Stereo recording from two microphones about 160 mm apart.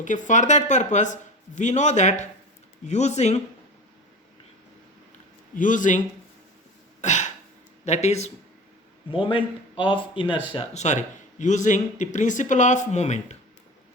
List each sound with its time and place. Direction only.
0.0 s speech: 50° left (ahead or behind)
5.5 s speech: 55° left (ahead or behind)
7.0 s throat clearing: 50° left (ahead or behind)
7.9 s speech: 45° left (ahead or behind)
9.1 s speech: 35° left (ahead or behind)
10.8 s speech: 45° left (ahead or behind)